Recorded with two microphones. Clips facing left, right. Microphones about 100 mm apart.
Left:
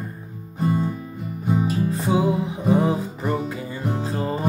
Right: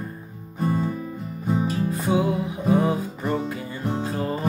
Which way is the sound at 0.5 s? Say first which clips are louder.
Left 1 dB; 5° left (ahead or behind).